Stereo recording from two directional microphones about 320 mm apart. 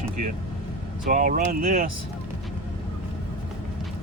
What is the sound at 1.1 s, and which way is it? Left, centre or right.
Speech, right.